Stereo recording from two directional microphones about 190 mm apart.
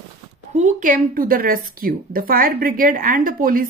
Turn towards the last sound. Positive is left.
turn(degrees=-45)  # may be behind; listen again after turning